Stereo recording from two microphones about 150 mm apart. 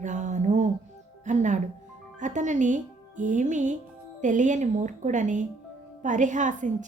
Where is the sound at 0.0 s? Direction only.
55° right (ahead or behind).